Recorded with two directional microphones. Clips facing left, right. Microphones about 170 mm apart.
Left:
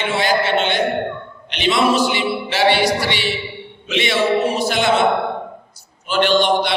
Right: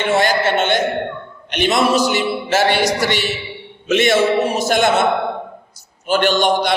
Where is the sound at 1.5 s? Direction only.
45° right (ahead or behind).